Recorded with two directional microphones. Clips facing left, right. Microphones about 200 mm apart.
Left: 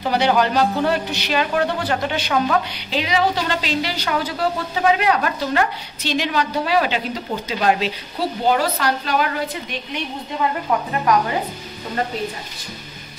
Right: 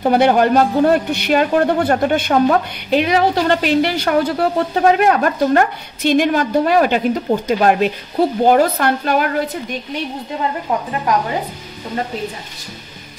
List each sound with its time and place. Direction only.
0.0 s a woman's voice: 55° right (ahead or behind)